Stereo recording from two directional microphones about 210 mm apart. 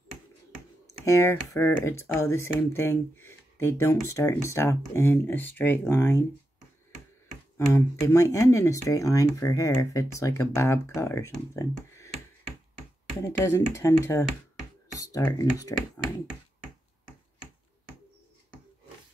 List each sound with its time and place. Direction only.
1.0 s speech: 15° left (ahead or behind)
7.5 s speech: 15° left (ahead or behind)
13.2 s speech: 10° left (ahead or behind)
15.0 s computer keyboard: 15° left (ahead or behind)